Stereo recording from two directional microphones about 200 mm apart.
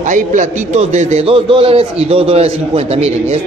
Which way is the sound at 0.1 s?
40° right (ahead or behind).